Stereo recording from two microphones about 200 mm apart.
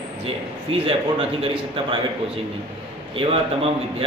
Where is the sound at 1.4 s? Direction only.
25° right (ahead or behind).